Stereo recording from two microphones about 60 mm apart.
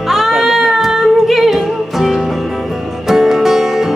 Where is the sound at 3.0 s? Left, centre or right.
Centre.